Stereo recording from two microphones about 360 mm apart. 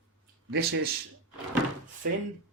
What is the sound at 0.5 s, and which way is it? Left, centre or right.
Speech, right.